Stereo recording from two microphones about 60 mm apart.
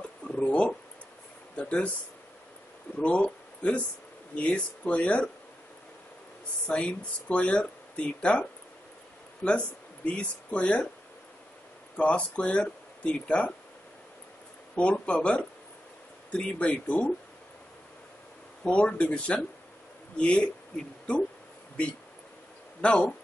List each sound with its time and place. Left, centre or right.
0.0 s a sound: centre
1.6 s speech: centre
3.0 s speech: centre
6.7 s speech: centre
12.0 s speech: left
14.8 s speech: centre
18.6 s speech: left
22.8 s speech: centre